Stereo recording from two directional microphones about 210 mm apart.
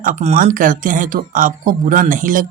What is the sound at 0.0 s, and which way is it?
Speech, 35° right (ahead or behind).